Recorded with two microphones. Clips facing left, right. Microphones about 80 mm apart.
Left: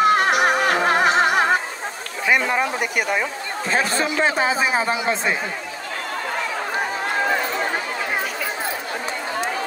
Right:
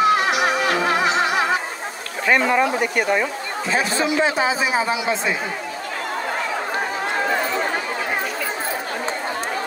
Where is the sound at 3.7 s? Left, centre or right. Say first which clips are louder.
Right 1 dB; left.